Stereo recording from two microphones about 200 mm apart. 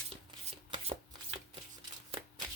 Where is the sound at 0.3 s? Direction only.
25° right (ahead or behind).